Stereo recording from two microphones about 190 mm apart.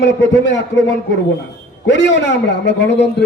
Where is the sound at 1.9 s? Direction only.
70° left (ahead or behind).